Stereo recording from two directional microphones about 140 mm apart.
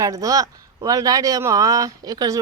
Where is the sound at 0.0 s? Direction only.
25° right (ahead or behind).